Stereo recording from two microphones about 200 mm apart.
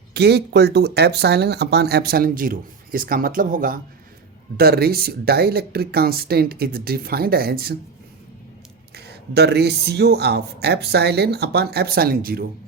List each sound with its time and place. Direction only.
0.1 s speech: 55° right (ahead or behind)
9.0 s speech: 55° right (ahead or behind)